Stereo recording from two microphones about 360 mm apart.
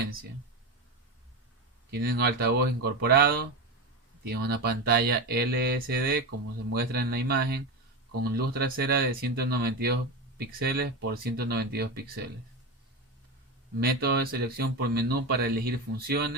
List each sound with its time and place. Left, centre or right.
1.9 s speech: right
14.0 s speech: right